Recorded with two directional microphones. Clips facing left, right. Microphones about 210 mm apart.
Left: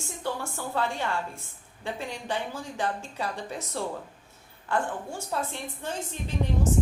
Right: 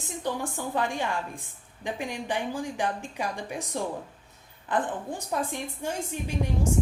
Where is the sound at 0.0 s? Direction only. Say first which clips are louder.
Right 2 dB; 15° right (ahead or behind).